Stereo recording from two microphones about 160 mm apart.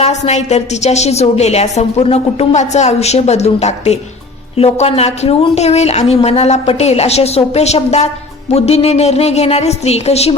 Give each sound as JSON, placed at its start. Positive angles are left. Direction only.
{"t": 0.0, "sound": "a woman's voice", "side_deg": 45}